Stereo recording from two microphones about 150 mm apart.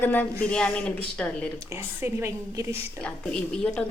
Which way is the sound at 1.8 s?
15° right (ahead or behind).